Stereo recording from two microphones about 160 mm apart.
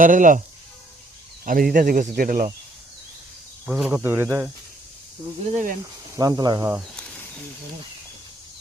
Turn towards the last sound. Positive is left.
turn(degrees=-25)  # may be behind; listen again after turning